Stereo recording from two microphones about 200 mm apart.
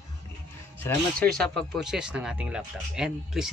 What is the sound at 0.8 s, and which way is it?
Speech, 10° left (ahead or behind).